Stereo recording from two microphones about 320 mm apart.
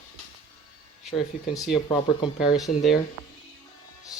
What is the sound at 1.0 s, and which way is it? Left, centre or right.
Speech, centre.